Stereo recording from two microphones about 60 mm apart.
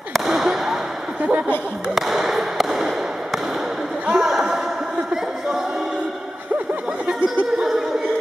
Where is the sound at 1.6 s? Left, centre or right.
Centre.